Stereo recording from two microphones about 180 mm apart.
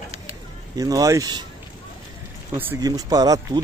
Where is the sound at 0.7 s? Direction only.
20° right (ahead or behind).